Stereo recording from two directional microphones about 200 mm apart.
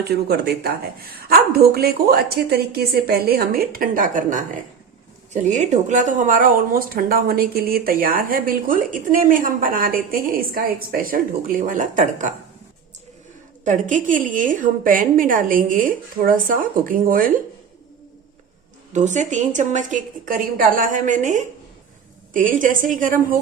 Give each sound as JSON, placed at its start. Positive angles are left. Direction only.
{"t": 0.3, "sound": "speech", "side_deg": -50}
{"t": 13.7, "sound": "speech", "side_deg": -40}
{"t": 18.9, "sound": "a woman's voice", "side_deg": -35}